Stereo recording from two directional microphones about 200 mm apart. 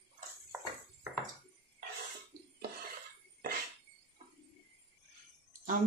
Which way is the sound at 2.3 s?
40° right (ahead or behind).